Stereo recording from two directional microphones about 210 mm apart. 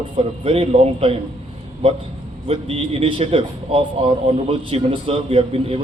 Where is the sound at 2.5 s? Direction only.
25° right (ahead or behind).